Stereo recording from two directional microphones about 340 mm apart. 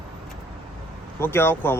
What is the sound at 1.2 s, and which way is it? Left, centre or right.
Speech, centre.